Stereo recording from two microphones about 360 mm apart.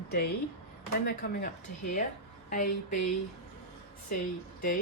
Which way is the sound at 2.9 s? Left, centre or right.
Left.